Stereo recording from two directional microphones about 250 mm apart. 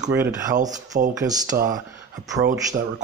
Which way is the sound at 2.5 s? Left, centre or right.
Right.